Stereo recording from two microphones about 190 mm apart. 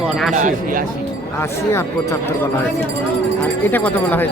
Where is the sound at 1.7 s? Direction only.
15° left (ahead or behind).